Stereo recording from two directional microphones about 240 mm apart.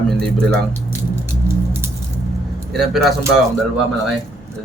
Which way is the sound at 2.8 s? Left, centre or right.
Centre.